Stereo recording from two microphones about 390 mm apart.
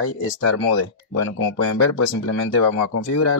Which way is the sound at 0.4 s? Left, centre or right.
Left.